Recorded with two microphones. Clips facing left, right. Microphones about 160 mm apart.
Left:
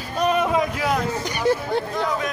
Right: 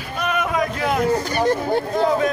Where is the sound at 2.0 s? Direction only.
30° right (ahead or behind).